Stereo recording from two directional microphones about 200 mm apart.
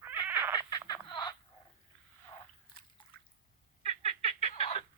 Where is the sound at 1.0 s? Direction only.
25° left (ahead or behind).